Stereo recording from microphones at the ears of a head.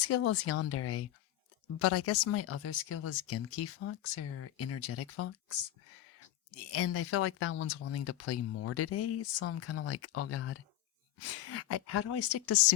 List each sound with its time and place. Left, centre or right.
0.0 s speech: left